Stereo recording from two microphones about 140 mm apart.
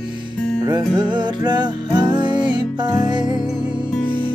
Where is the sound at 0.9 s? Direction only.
30° right (ahead or behind).